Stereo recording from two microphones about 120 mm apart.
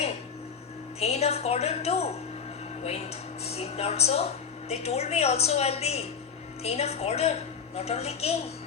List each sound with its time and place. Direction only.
0.9 s a woman's voice: 60° left (ahead or behind)